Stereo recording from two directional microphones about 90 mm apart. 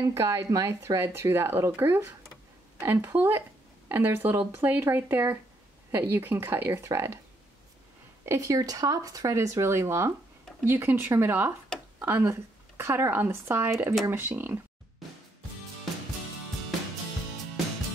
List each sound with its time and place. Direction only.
0.0 s speech: 35° right (ahead or behind)
8.3 s speech: 35° right (ahead or behind)